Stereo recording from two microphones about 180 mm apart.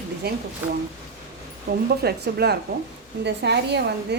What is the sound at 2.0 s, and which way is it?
A woman's voice, 65° right (ahead or behind).